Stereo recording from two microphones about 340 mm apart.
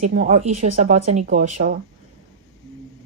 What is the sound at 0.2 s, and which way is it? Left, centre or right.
A woman's voice, right.